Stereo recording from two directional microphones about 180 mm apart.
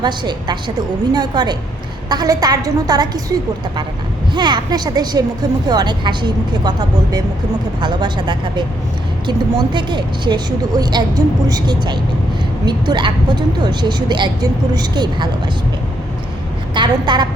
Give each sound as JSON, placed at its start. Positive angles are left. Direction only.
{"t": 0.0, "sound": "speech", "side_deg": -25}
{"t": 4.4, "sound": "speech", "side_deg": -25}
{"t": 16.7, "sound": "speech", "side_deg": -25}